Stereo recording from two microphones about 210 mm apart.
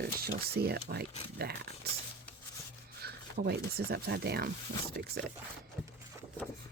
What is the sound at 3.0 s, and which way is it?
Speech, 50° right (ahead or behind).